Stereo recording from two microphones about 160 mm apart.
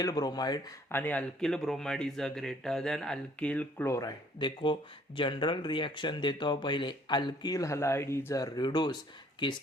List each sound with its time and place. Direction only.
0.0 s speech: 25° left (ahead or behind)
0.9 s speech: 10° left (ahead or behind)
4.4 s speech: 30° left (ahead or behind)